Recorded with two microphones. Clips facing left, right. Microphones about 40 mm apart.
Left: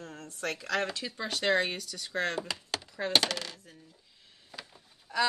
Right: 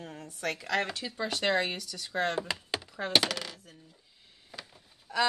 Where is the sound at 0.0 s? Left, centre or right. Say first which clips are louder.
Right 1 dB; centre.